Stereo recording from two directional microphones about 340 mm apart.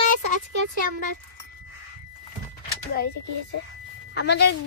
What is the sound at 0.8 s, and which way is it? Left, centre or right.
Child singing, left.